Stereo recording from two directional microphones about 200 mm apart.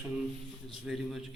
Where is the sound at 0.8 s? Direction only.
Centre (ahead or behind).